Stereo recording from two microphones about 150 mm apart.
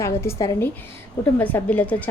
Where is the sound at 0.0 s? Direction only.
20° left (ahead or behind).